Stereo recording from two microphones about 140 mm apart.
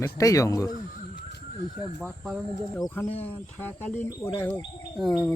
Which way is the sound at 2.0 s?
5° right (ahead or behind).